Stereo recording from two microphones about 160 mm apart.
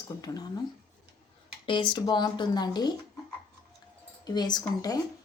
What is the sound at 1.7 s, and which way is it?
Speech, 30° left (ahead or behind).